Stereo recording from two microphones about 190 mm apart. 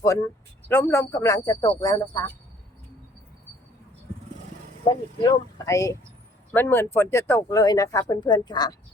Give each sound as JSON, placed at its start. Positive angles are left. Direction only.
{"t": 0.7, "sound": "speech", "side_deg": 15}
{"t": 4.9, "sound": "speech", "side_deg": 20}